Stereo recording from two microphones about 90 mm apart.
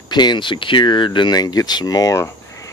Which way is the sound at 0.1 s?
55° left (ahead or behind).